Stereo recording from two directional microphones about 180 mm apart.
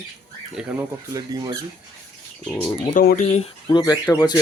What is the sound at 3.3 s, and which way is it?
Speech, 30° left (ahead or behind).